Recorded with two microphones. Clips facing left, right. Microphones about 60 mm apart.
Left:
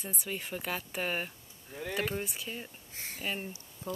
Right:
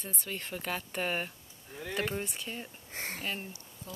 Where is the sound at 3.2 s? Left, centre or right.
Centre.